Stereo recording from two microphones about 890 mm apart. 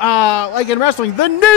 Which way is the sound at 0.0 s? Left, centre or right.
Left.